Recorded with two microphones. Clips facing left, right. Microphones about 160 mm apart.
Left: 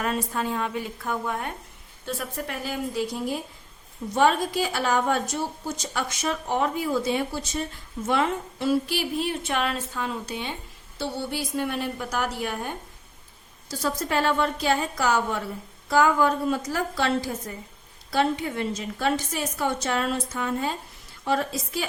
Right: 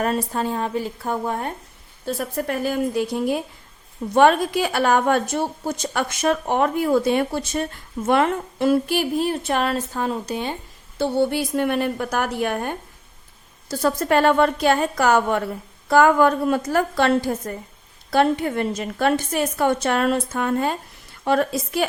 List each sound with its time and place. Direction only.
0.0 s a woman's voice: 40° right (ahead or behind); by 21.8 s 60° right (ahead or behind)